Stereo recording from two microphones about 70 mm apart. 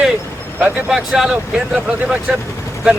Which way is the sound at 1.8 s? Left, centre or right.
Centre.